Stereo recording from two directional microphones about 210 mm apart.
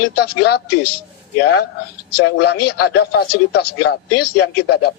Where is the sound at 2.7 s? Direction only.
50° left (ahead or behind).